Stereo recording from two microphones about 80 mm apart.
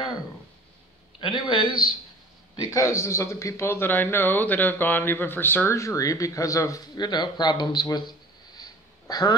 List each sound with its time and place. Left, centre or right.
1.2 s a man's voice: left
2.7 s speech: left
5.8 s speech: left
7.0 s speech: left
8.5 s sniff: left